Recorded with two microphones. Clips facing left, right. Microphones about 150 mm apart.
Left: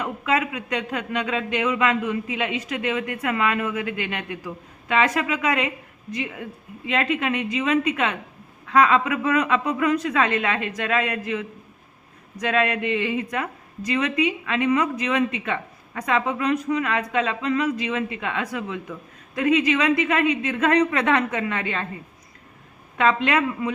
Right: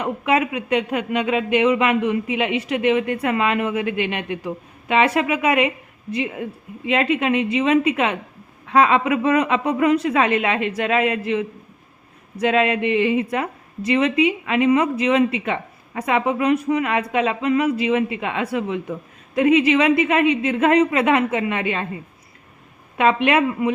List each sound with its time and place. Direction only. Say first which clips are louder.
0.0 s speech: right 4 dB; 25° right (ahead or behind)
23.0 s speech: right 3 dB; 20° right (ahead or behind)